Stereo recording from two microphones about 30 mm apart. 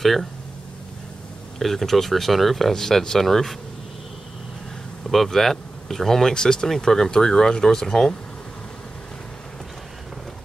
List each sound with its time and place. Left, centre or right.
0.0 s speech: centre
1.6 s speech: centre
2.7 s speech: centre
5.0 s speech: centre
6.3 s speech: left